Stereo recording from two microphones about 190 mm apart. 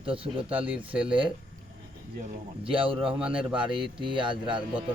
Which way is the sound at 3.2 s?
5° right (ahead or behind).